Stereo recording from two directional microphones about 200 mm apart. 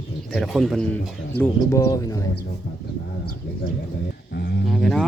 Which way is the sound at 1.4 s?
15° left (ahead or behind).